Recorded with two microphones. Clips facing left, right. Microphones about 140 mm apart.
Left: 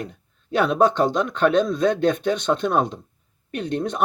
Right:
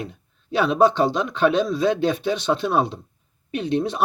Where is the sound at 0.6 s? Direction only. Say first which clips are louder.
Right 1 dB; 5° right (ahead or behind).